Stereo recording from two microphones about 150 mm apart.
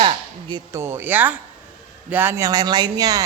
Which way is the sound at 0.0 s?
30° right (ahead or behind).